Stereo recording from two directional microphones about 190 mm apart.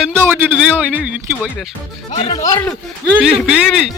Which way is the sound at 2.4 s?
15° left (ahead or behind).